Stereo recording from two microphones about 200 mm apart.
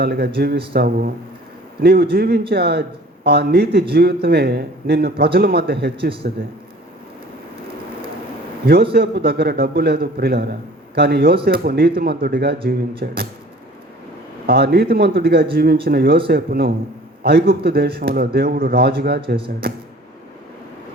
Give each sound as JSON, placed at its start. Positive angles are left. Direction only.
{"t": 0.0, "sound": "a man's voice", "side_deg": -55}
{"t": 8.6, "sound": "a man's voice", "side_deg": -50}
{"t": 14.4, "sound": "a man's voice", "side_deg": -55}